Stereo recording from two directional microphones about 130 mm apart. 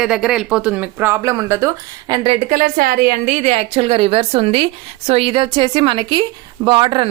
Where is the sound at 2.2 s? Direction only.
45° right (ahead or behind).